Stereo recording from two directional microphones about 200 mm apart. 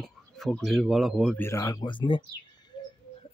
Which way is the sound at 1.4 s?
15° left (ahead or behind).